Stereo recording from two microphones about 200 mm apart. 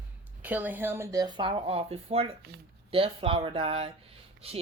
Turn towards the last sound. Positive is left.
turn(degrees=-30)  # may be behind; listen again after turning